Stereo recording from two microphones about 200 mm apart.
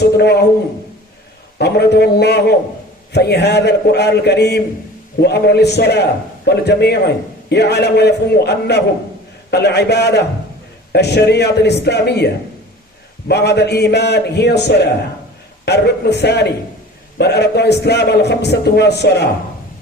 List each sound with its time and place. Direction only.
0.0 s a man's voice: 55° left (ahead or behind)
1.5 s a man's voice: 55° left (ahead or behind)